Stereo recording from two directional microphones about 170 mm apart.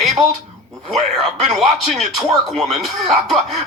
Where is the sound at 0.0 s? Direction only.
Centre (ahead or behind).